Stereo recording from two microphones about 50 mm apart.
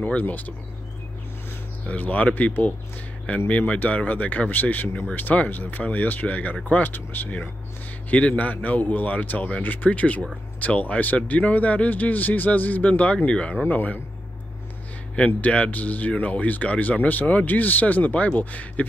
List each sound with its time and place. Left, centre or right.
0.0 s speech: left
1.9 s speech: left
13.7 s speech: left
15.1 s speech: left